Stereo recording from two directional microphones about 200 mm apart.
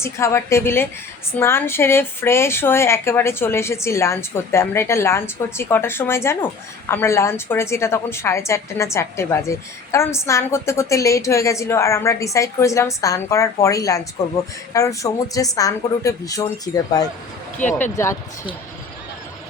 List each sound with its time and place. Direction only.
0.0 s a woman's voice: 15° left (ahead or behind)
17.6 s speech: 40° left (ahead or behind)
17.9 s a woman's voice: 15° left (ahead or behind)